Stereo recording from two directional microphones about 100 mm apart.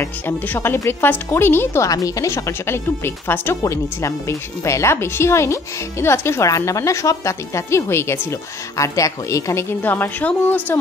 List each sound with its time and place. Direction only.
0.0 s speech: 20° left (ahead or behind)
1.9 s speech: 35° left (ahead or behind); by 10.8 s 20° left (ahead or behind)